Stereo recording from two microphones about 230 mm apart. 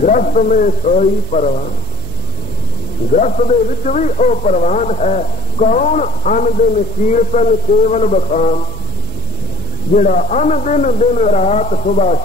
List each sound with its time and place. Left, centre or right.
0.0 s speech: left
3.1 s speech: left
9.9 s speech: left